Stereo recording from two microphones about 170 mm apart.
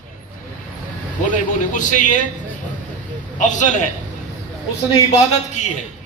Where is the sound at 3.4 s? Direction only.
45° left (ahead or behind).